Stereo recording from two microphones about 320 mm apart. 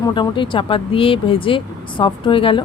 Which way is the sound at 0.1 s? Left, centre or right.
Centre.